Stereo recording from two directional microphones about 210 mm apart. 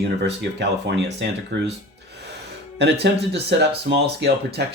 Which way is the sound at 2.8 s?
55° right (ahead or behind).